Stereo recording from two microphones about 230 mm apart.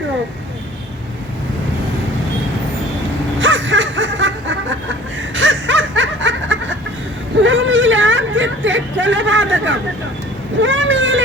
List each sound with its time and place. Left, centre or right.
3.4 s snicker: right
7.4 s a sound: right
10.6 s vehicle: right